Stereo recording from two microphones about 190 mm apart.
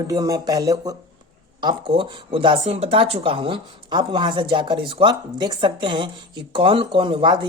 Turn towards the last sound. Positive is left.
turn(degrees=-25)  # may be behind; listen again after turning